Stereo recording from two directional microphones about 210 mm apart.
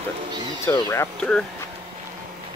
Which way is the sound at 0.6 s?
15° left (ahead or behind).